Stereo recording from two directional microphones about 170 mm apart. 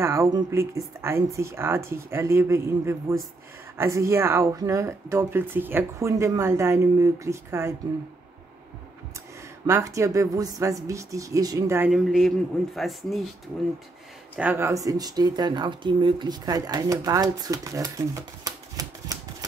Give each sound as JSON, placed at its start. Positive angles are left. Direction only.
{"t": 0.0, "sound": "speech", "side_deg": -15}
{"t": 9.7, "sound": "speech", "side_deg": -20}
{"t": 11.9, "sound": "a man's voice", "side_deg": 0}
{"t": 14.3, "sound": "speech", "side_deg": -10}